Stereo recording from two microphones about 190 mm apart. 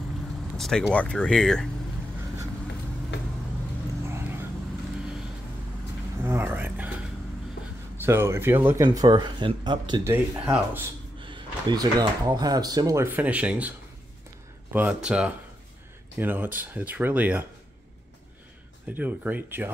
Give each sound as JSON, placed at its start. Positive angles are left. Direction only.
{"t": 0.6, "sound": "speech", "side_deg": 0}
{"t": 4.1, "sound": "vehicle", "side_deg": -10}
{"t": 6.2, "sound": "a sound", "side_deg": -10}
{"t": 8.0, "sound": "speech", "side_deg": -10}
{"t": 10.0, "sound": "speech", "side_deg": -10}
{"t": 11.1, "sound": "speech", "side_deg": -25}
{"t": 18.9, "sound": "speech", "side_deg": -10}